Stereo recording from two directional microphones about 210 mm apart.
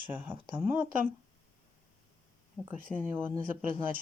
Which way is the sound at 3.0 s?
10° right (ahead or behind).